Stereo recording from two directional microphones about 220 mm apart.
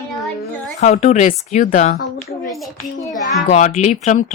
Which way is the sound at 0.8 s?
30° left (ahead or behind).